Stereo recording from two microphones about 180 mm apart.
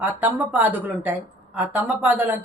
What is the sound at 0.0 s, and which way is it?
A woman's voice, 10° right (ahead or behind).